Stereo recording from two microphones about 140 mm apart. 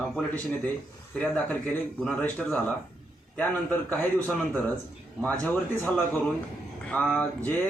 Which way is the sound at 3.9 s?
10° left (ahead or behind).